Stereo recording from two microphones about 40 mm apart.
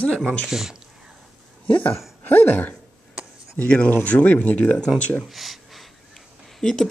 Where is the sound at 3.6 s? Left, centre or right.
Left.